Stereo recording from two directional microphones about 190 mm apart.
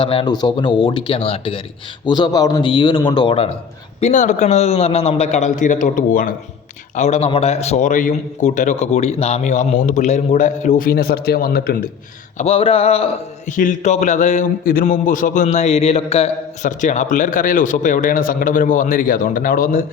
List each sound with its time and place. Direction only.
0.0 s speech: 25° left (ahead or behind)
4.0 s a man's voice: 40° left (ahead or behind)
12.4 s a man's voice: 30° left (ahead or behind); by 19.8 s 50° left (ahead or behind)